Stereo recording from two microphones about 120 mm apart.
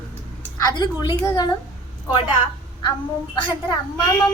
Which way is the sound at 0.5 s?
35° left (ahead or behind).